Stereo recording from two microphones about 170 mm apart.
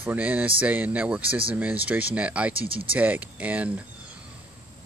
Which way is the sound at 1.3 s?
30° right (ahead or behind).